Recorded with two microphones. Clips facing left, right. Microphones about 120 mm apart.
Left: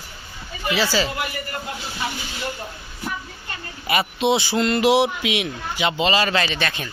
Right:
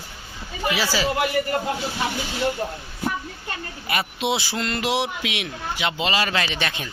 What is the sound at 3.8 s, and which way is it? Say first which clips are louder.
A man's voice: left 5 dB; 5° left (ahead or behind).